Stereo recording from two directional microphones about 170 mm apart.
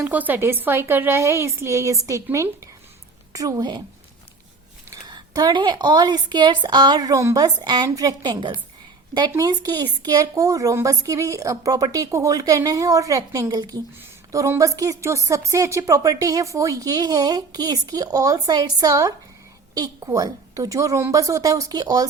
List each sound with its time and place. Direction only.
0.0 s a woman's voice: 10° right (ahead or behind)
4.9 s a woman's voice: 20° right (ahead or behind)